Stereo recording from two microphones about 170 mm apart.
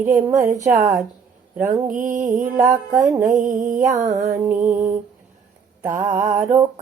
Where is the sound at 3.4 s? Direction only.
45° right (ahead or behind).